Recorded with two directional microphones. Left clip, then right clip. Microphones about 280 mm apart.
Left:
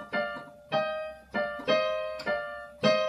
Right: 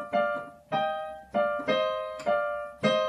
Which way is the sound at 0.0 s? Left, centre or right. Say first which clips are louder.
Right 5 dB; left.